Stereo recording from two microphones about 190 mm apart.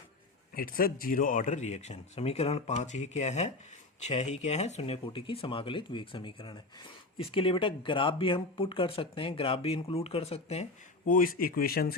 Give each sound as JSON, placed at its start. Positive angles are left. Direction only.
{"t": 0.5, "sound": "speech", "side_deg": 50}
{"t": 11.1, "sound": "speech", "side_deg": 50}